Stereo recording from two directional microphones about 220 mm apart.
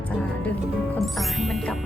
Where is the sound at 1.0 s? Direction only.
Centre (ahead or behind).